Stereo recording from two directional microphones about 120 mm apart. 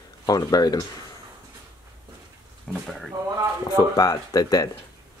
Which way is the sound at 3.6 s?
30° left (ahead or behind).